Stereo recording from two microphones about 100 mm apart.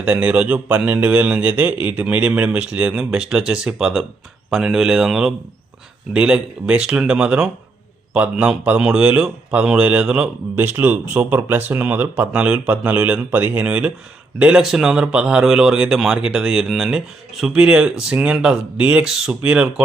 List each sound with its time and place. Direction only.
0.0 s a man's voice: 15° right (ahead or behind)